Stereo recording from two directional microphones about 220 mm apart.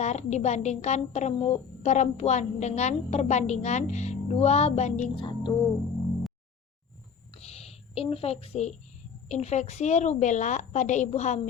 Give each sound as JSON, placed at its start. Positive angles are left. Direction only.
{"t": 0.0, "sound": "a woman's voice", "side_deg": 30}
{"t": 7.3, "sound": "a sound", "side_deg": 30}
{"t": 9.3, "sound": "a woman's voice", "side_deg": 30}